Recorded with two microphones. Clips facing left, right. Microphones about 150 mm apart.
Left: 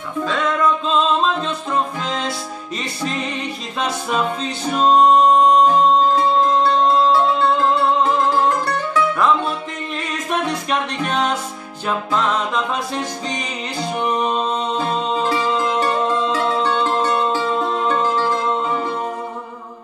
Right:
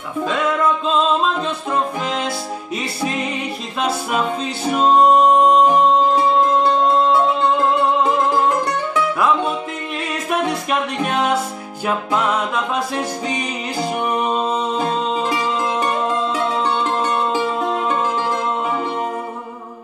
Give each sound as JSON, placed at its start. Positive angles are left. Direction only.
{"t": 0.2, "sound": "music", "side_deg": -10}
{"t": 8.9, "sound": "music", "side_deg": -15}
{"t": 10.5, "sound": "music", "side_deg": -5}